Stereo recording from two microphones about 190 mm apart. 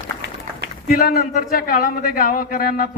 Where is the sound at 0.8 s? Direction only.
50° left (ahead or behind).